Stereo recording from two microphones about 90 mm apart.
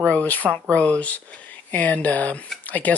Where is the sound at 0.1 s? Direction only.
15° left (ahead or behind).